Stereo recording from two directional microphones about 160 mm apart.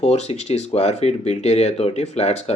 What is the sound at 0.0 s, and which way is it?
Speech, 40° left (ahead or behind).